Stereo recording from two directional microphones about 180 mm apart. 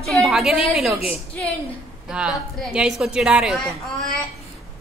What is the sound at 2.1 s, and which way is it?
A woman's voice, 5° right (ahead or behind).